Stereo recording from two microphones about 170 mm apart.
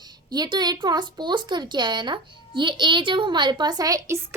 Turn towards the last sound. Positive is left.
turn(degrees=-20)  # may be behind; listen again after turning